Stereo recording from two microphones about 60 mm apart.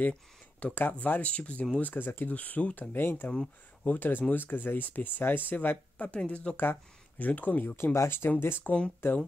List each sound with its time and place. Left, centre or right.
0.1 s speech: centre
0.7 s speech: left
7.7 s speech: left
8.6 s speech: left
9.0 s speech: left